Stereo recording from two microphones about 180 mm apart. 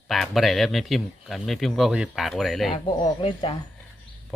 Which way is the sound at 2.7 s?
30° left (ahead or behind).